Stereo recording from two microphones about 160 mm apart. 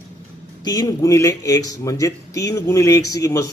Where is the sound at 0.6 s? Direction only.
25° left (ahead or behind).